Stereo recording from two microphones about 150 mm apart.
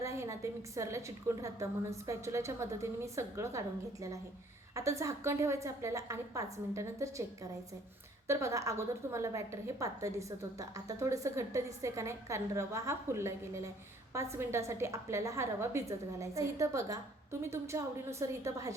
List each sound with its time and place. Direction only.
0.0 s a woman's voice: 20° right (ahead or behind)
4.7 s a woman's voice: 20° right (ahead or behind)
8.3 s a woman's voice: 20° right (ahead or behind)